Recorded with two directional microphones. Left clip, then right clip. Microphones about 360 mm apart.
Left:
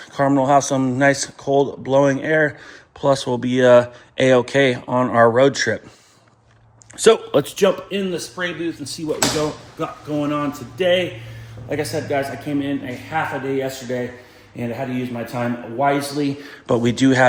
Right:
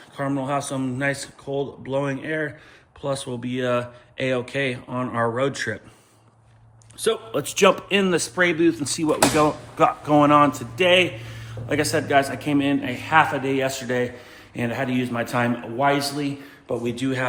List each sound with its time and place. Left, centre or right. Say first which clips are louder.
0.2 s speech: left 10 dB; centre
7.0 s speech: left 9 dB; centre
8.6 s speech: right 6 dB; centre
8.9 s a man's voice: right 2 dB; centre
9.7 s speech: right 7 dB; centre
10.2 s a man's voice: right 7 dB; centre
14.7 s a man's voice: even; centre
16.2 s speech: left 6 dB; left